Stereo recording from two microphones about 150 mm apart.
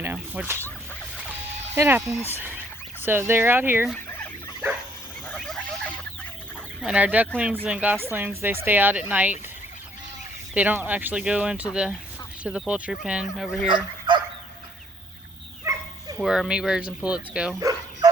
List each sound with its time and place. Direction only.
0.0 s a sound: 15° right (ahead or behind)
1.1 s fowl: 15° right (ahead or behind)
3.0 s speech: 15° right (ahead or behind)
5.4 s a sound: 5° left (ahead or behind)
6.8 s speech: 10° right (ahead or behind)
10.5 s speech: 10° right (ahead or behind)
13.7 s dog: 35° right (ahead or behind)
15.7 s bow-wow: 20° right (ahead or behind)
16.1 s speech: centre (ahead or behind)
17.6 s bow-wow: 25° right (ahead or behind)